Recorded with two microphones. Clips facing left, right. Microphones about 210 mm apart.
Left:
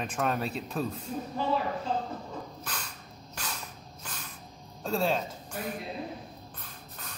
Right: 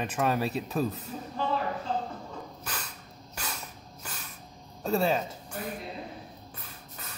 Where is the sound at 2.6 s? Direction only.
5° right (ahead or behind).